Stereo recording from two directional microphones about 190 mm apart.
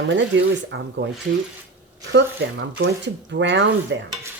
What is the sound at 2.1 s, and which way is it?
A woman's voice, 70° right (ahead or behind).